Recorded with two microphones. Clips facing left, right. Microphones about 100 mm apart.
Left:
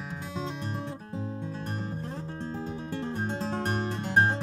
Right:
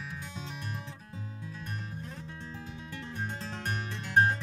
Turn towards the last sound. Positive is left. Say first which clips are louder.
# left 2 dB
turn(degrees=35)  # may be behind; listen again after turning